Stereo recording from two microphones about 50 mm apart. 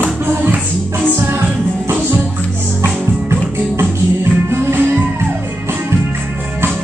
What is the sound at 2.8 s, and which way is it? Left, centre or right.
Music, right.